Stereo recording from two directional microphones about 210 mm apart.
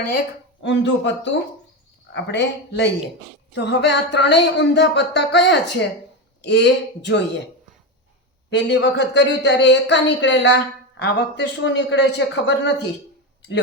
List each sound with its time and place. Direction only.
0.6 s speech: 60° left (ahead or behind)
8.4 s speech: 55° left (ahead or behind)